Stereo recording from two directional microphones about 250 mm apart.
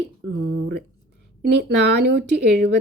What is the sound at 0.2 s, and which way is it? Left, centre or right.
Speech, right.